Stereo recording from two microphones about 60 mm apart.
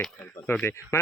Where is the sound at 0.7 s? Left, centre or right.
Left.